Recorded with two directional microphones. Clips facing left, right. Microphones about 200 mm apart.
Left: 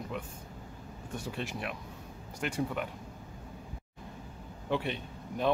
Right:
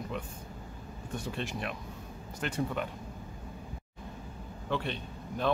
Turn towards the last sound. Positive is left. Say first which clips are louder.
# left 1 dB
turn(degrees=10)  # may be behind; listen again after turning